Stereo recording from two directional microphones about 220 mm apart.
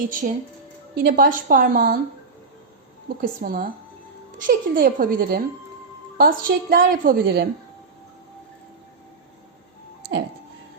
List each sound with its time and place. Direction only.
0.1 s a woman's voice: 40° right (ahead or behind)
3.2 s a woman's voice: 40° right (ahead or behind)